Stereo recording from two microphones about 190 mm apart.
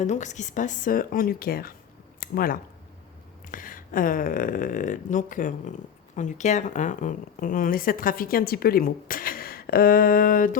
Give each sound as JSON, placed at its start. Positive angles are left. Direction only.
{"t": 0.0, "sound": "speech", "side_deg": 40}